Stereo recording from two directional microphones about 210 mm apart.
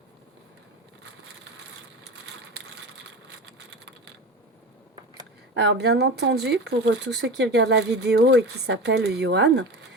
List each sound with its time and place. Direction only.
5.5 s speech: 55° right (ahead or behind)